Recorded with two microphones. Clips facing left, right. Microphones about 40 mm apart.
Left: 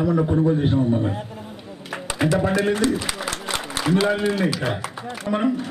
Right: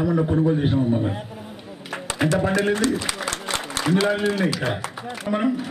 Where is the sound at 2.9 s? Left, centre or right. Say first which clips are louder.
Even; centre.